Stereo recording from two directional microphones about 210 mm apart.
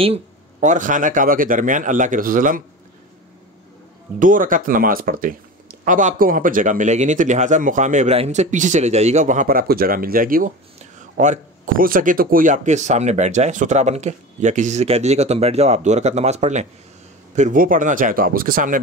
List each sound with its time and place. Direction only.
0.0 s speech: 30° right (ahead or behind)
4.2 s speech: 40° right (ahead or behind)